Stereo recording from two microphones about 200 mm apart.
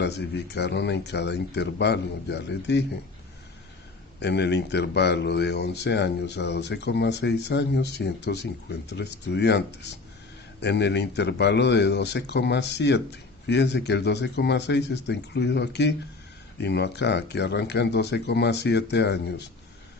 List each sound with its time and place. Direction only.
0.0 s speech: 55° left (ahead or behind)
4.2 s speech: 60° left (ahead or behind)